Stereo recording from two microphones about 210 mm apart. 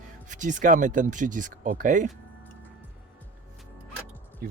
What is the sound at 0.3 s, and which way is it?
Speech, 35° right (ahead or behind).